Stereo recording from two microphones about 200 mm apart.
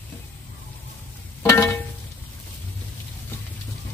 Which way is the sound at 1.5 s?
15° left (ahead or behind).